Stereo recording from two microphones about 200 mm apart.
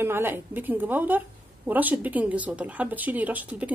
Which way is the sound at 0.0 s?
10° right (ahead or behind).